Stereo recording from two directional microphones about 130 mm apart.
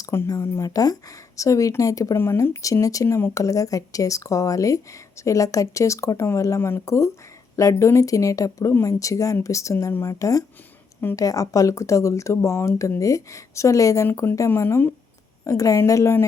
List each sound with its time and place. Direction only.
0.0 s speech: 25° left (ahead or behind)